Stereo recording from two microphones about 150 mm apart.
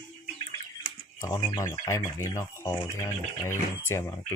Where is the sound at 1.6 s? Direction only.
20° left (ahead or behind).